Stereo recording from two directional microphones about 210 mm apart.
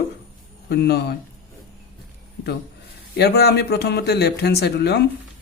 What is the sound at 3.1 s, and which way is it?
Speech, 50° left (ahead or behind).